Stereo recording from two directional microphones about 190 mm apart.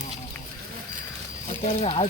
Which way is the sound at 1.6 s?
30° left (ahead or behind).